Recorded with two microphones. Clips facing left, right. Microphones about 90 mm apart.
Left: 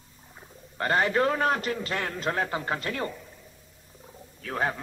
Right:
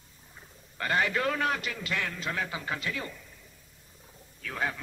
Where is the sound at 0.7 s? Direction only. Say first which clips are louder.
Left 4 dB; 35° left (ahead or behind).